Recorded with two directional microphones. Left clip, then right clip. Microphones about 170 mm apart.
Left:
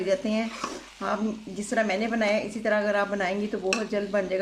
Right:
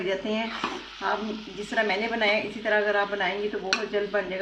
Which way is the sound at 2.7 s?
30° left (ahead or behind).